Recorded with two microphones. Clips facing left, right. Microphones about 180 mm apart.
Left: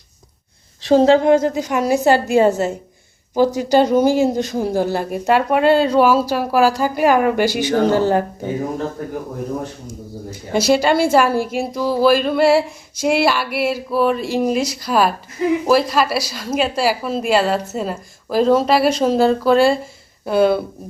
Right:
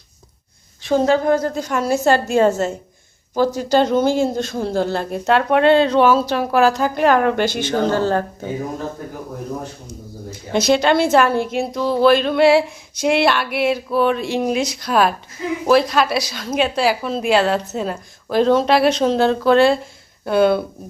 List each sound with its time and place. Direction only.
0.9 s speech: 30° left (ahead or behind)
10.5 s a woman's voice: 10° left (ahead or behind)